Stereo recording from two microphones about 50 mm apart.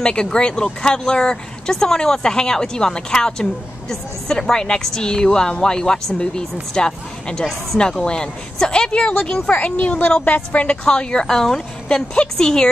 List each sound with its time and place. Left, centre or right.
0.0 s a woman's voice: centre
10.9 s a woman's voice: centre
11.2 s a woman's voice: centre